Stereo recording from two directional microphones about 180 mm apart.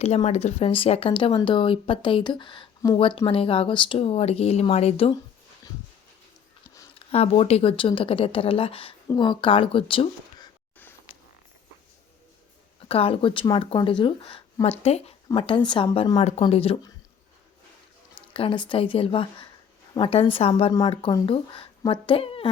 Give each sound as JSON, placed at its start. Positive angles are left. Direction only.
{"t": 0.0, "sound": "speech", "side_deg": 35}
{"t": 7.1, "sound": "speech", "side_deg": 35}
{"t": 12.9, "sound": "speech", "side_deg": 30}
{"t": 16.1, "sound": "speech", "side_deg": 35}
{"t": 18.1, "sound": "speech", "side_deg": 30}